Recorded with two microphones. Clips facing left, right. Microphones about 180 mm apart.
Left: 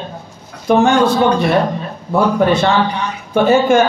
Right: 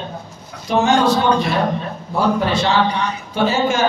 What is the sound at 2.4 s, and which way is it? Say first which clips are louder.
A man's voice: left 4 dB; 55° left (ahead or behind).